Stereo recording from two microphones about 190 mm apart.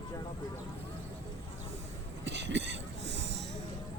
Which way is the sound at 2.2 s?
65° right (ahead or behind).